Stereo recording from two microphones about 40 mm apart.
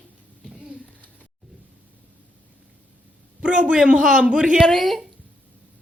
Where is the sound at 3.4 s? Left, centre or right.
Right.